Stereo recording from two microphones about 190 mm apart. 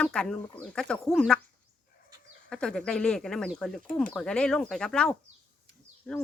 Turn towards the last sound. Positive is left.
turn(degrees=5)  # may be behind; listen again after turning